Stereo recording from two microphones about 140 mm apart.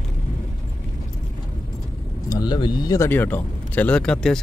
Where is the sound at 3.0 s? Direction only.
15° left (ahead or behind).